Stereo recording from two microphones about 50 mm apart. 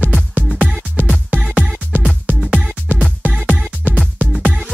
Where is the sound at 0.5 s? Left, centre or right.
Centre.